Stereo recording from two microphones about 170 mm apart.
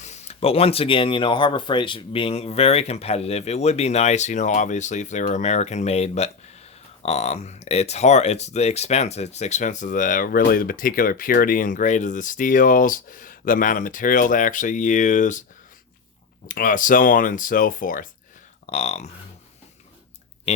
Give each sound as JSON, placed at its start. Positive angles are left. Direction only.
{"t": 0.0, "sound": "speech", "side_deg": 40}
{"t": 16.5, "sound": "speech", "side_deg": 50}
{"t": 18.6, "sound": "speech", "side_deg": 40}